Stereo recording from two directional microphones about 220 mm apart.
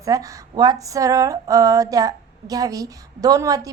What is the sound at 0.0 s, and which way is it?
Speech, 15° right (ahead or behind).